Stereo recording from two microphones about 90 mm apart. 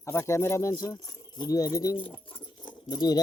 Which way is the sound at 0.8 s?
50° left (ahead or behind).